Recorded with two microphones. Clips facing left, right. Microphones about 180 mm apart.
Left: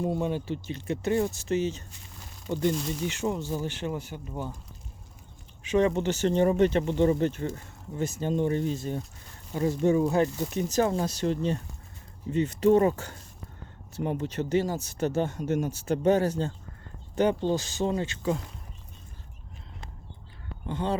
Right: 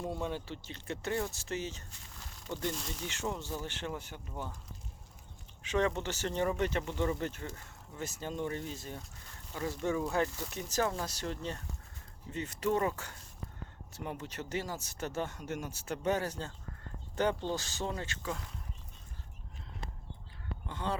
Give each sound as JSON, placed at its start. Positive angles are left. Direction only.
{"t": 0.0, "sound": "speech", "side_deg": 15}
{"t": 5.6, "sound": "speech", "side_deg": 15}
{"t": 17.2, "sound": "speech", "side_deg": 15}
{"t": 20.7, "sound": "speech", "side_deg": 20}